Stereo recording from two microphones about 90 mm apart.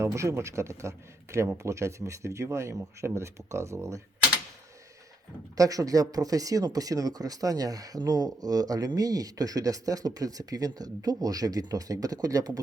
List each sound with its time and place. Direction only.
0.0 s speech: 35° right (ahead or behind)
5.5 s speech: 40° right (ahead or behind)